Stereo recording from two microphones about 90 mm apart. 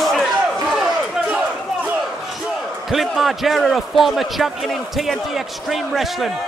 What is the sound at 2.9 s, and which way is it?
A man's voice, centre (ahead or behind).